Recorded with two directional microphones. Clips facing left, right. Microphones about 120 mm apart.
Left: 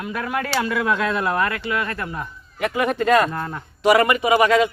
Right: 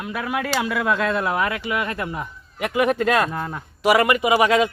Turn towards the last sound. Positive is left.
turn(degrees=-10)  # may be behind; listen again after turning